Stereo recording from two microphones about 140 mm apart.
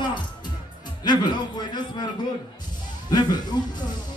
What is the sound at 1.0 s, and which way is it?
Speech, 30° left (ahead or behind).